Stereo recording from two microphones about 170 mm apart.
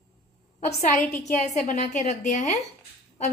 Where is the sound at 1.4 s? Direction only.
45° left (ahead or behind).